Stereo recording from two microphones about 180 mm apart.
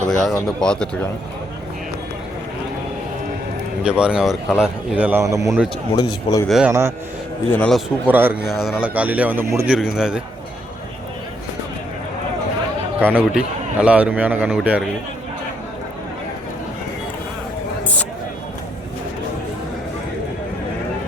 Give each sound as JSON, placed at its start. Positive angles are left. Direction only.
{"t": 0.1, "sound": "speech", "side_deg": 0}
{"t": 3.8, "sound": "speech", "side_deg": -5}
{"t": 6.0, "sound": "speech", "side_deg": 25}
{"t": 6.5, "sound": "speech", "side_deg": -5}
{"t": 7.5, "sound": "a man's voice", "side_deg": 5}
{"t": 8.0, "sound": "a man's voice", "side_deg": -10}
{"t": 9.7, "sound": "speech", "side_deg": -5}
{"t": 13.0, "sound": "a man's voice", "side_deg": -10}